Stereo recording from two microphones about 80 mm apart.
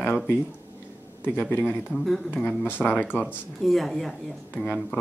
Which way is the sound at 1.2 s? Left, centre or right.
Left.